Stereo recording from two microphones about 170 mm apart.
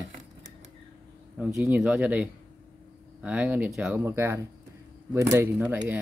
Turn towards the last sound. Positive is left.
turn(degrees=-10)  # may be behind; listen again after turning